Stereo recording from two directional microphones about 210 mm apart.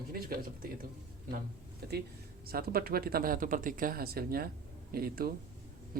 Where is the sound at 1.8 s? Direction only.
45° right (ahead or behind).